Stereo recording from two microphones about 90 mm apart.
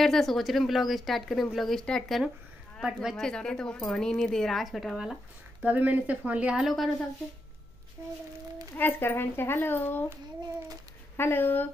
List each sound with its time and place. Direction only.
0.0 s a woman's voice: 5° left (ahead or behind)
2.8 s speech: 5° right (ahead or behind)
3.2 s a woman's voice: 10° left (ahead or behind)
5.6 s speech: 15° right (ahead or behind)
6.6 s a woman's voice: centre (ahead or behind)
8.0 s speech: 35° right (ahead or behind)
8.7 s speech: 25° left (ahead or behind)
11.1 s speech: 25° left (ahead or behind)